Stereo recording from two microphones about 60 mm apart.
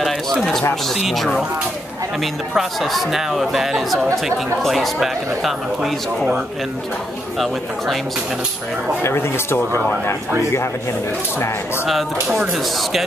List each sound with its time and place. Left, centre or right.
0.0 s a sound: centre
0.9 s speech: centre
2.5 s speech: centre
7.3 s speech: centre
9.0 s speech: left
12.3 s speech: centre